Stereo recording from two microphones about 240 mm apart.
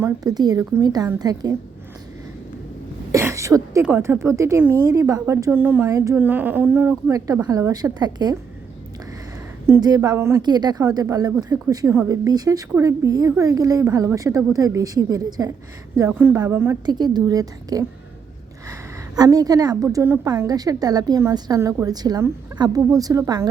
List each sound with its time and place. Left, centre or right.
0.0 s a woman's voice: centre
3.1 s a woman's voice: centre
9.6 s a woman's voice: centre